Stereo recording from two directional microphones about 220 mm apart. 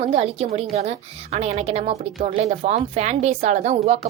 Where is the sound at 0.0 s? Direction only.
25° right (ahead or behind).